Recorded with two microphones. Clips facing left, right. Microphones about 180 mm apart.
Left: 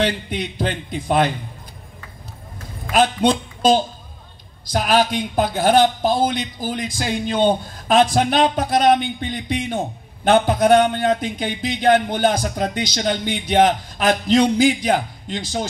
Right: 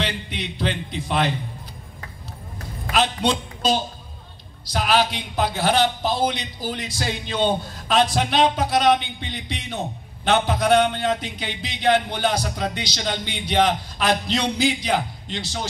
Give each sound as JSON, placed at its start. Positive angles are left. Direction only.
{"t": 0.0, "sound": "a man's voice", "side_deg": 45}
{"t": 2.9, "sound": "a man's voice", "side_deg": 45}